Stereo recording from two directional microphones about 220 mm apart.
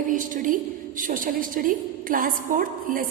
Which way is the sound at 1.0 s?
40° right (ahead or behind).